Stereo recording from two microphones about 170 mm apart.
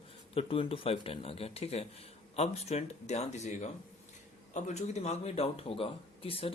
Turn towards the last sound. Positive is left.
turn(degrees=35)  # may be behind; listen again after turning